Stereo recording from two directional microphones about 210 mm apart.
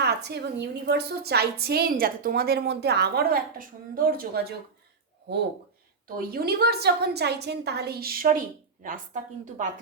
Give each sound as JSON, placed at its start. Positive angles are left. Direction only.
{"t": 0.0, "sound": "a sound", "side_deg": -50}
{"t": 0.9, "sound": "a woman's voice", "side_deg": -50}
{"t": 6.1, "sound": "a woman's voice", "side_deg": -45}